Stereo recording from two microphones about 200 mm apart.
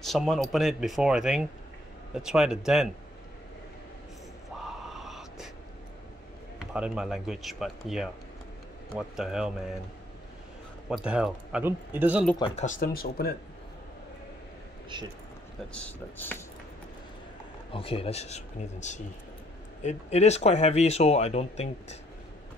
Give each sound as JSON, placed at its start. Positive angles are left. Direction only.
{"t": 0.0, "sound": "speech", "side_deg": 0}
{"t": 4.6, "sound": "a sound", "side_deg": 0}
{"t": 6.6, "sound": "speech", "side_deg": -5}
{"t": 10.9, "sound": "speech", "side_deg": -5}
{"t": 12.6, "sound": "speech", "side_deg": 45}
{"t": 15.7, "sound": "speech", "side_deg": 10}
{"t": 17.6, "sound": "speech", "side_deg": 25}